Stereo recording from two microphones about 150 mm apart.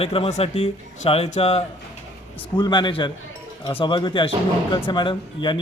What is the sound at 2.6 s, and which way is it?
A man's voice, 30° left (ahead or behind).